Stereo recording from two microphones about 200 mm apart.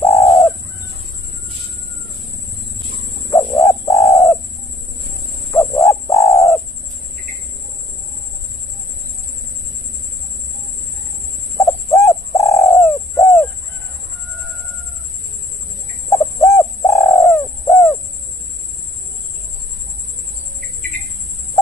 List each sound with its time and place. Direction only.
0.0 s bird: 15° left (ahead or behind)
3.6 s bird: 15° left (ahead or behind)
5.5 s bird: 15° left (ahead or behind)
11.5 s bird: 15° left (ahead or behind)
16.1 s bird: 15° left (ahead or behind)